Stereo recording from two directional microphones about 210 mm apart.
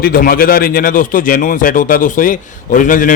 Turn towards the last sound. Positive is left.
turn(degrees=40)  # may be behind; listen again after turning